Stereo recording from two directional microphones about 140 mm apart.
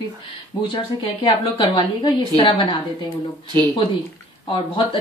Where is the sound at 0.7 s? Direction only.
35° left (ahead or behind).